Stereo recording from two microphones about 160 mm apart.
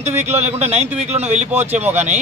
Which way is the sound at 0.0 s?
45° right (ahead or behind).